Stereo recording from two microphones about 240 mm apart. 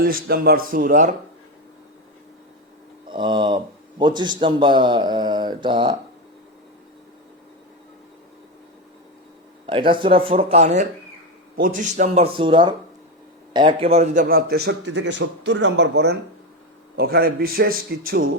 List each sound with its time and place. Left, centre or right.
0.0 s a man's voice: right
3.1 s a man's voice: centre
9.6 s a man's voice: right